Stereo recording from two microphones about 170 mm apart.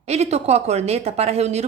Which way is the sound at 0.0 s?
40° right (ahead or behind).